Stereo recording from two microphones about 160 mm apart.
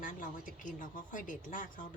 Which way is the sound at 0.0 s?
55° left (ahead or behind).